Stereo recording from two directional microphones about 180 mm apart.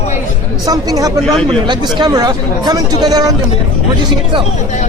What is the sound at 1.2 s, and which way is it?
Speech, 5° left (ahead or behind).